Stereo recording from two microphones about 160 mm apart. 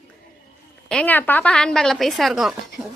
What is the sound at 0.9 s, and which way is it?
A woman's voice, 10° left (ahead or behind).